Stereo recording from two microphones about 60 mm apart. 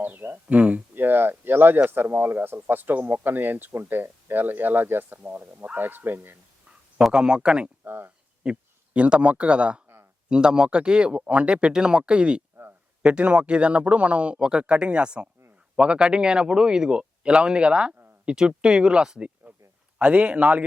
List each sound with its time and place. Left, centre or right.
0.0 s speech: right
0.9 s a sound: right
1.9 s speech: right
7.1 s speech: centre
7.9 s speech: right
8.4 s a man's voice: right
20.0 s speech: right